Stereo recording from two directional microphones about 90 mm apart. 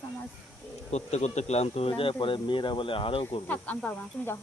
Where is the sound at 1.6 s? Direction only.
90° left.